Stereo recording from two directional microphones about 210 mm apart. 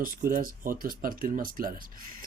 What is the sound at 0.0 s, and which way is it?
Speech, 40° right (ahead or behind).